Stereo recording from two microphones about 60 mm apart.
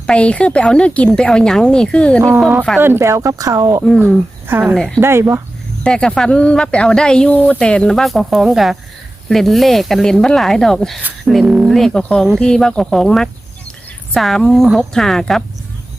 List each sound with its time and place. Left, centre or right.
0.1 s speech: centre
3.0 s speech: right
4.0 s speech: right
5.8 s speech: centre
12.0 s speech: centre